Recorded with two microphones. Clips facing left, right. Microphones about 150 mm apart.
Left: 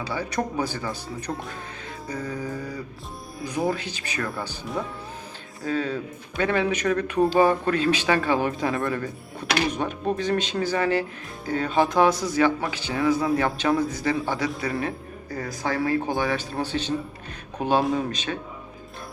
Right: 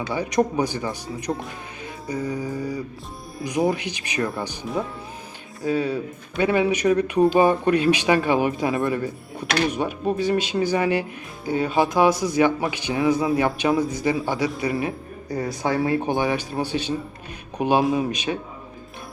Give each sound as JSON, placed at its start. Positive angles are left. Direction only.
{"t": 0.1, "sound": "speech", "side_deg": -15}
{"t": 5.6, "sound": "speech", "side_deg": -10}